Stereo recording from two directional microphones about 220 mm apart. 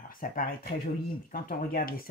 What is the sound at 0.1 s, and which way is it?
A woman's voice, 40° left (ahead or behind).